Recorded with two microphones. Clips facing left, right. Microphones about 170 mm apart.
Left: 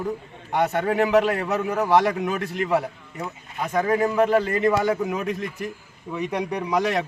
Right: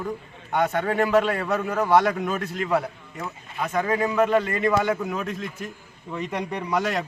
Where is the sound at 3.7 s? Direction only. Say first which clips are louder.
Left 2 dB; 20° left (ahead or behind).